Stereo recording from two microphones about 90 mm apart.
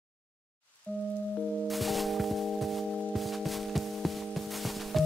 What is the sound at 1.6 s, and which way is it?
Music, centre (ahead or behind).